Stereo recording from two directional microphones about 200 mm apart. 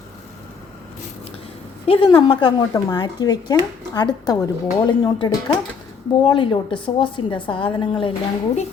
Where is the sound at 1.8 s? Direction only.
25° left (ahead or behind).